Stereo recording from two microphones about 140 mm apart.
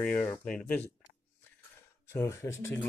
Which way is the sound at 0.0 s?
10° left (ahead or behind).